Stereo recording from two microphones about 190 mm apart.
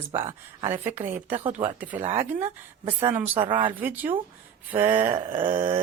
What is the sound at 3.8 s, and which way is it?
Speech, 10° right (ahead or behind).